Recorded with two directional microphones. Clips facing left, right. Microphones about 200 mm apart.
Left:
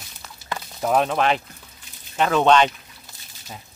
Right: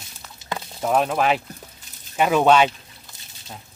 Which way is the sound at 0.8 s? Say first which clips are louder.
Even; centre (ahead or behind).